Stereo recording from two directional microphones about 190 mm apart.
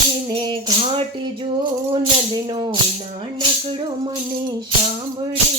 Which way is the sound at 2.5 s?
25° right (ahead or behind).